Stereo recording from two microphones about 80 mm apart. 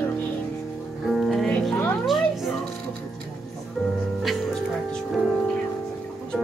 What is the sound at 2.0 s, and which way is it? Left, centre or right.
Music, centre.